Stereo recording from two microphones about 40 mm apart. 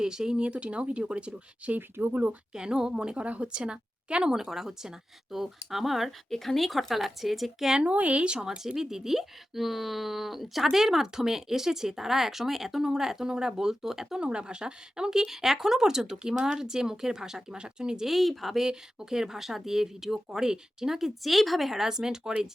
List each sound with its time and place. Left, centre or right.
0.0 s speech: centre
1.7 s speech: right
2.5 s speech: centre
4.4 s speech: centre
7.7 s speech: right
8.4 s speech: centre
14.2 s speech: right
18.1 s speech: centre
18.6 s speech: centre
21.7 s speech: centre